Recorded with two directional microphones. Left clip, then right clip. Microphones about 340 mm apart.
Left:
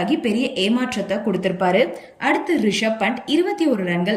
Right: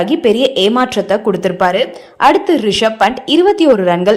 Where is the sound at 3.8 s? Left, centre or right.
Right.